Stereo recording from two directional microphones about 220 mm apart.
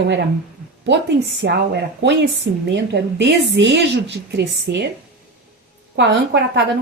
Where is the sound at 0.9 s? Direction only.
55° right (ahead or behind).